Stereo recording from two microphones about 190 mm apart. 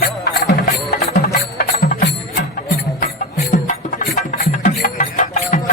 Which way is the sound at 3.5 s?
40° left (ahead or behind).